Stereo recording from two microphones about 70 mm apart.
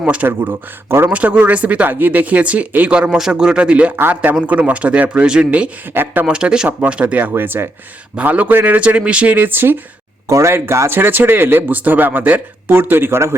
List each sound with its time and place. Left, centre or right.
0.0 s speech: centre
0.3 s speech: right
1.1 s speech: centre
5.9 s speech: right
6.2 s speech: centre
6.7 s speech: right
10.2 s speech: right
10.5 s speech: right